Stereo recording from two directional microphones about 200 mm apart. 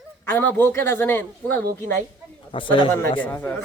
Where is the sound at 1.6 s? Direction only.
50° right (ahead or behind).